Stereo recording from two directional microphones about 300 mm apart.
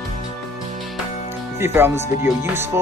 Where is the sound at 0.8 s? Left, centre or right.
Centre.